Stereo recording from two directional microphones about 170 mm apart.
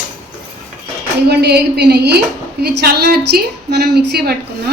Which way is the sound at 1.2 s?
80° right.